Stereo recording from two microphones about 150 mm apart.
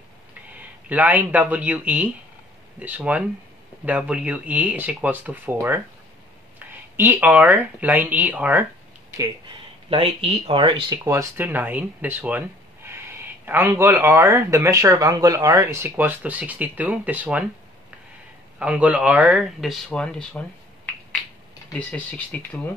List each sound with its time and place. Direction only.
0.5 s speech: 10° right (ahead or behind)
9.8 s speech: 40° right (ahead or behind); by 17.5 s 10° right (ahead or behind)
18.6 s speech: 10° right (ahead or behind); by 22.6 s 10° left (ahead or behind)